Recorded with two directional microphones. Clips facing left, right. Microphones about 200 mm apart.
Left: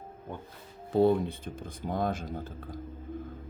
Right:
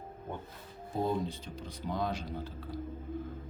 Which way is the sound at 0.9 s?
70° left (ahead or behind).